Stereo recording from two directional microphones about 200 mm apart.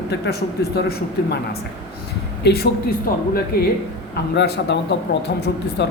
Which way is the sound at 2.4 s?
55° left (ahead or behind).